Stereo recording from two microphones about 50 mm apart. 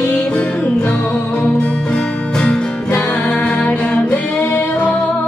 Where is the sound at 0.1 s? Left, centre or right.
Centre.